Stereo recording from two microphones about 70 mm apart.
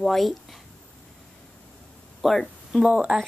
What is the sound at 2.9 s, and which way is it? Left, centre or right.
Speech, centre.